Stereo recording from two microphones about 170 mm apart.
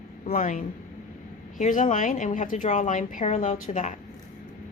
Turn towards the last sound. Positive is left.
turn(degrees=45)  # may be behind; listen again after turning